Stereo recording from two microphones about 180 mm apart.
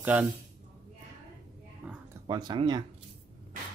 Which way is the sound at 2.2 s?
25° right (ahead or behind).